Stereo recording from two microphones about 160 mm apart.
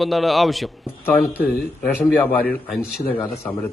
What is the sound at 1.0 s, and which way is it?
A man's voice, 10° left (ahead or behind).